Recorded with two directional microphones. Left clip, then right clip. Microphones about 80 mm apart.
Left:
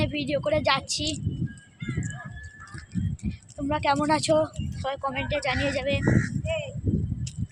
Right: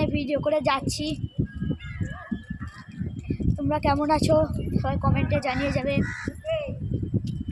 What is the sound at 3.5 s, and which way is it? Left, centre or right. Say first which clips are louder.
Speech: even; right.